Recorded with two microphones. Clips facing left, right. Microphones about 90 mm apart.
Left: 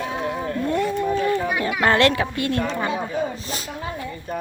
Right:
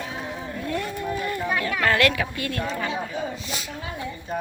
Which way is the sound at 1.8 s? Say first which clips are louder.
Left 4 dB; 30° left (ahead or behind).